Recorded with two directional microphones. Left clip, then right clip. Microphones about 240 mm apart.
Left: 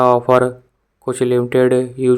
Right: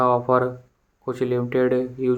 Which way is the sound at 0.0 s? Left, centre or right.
Left.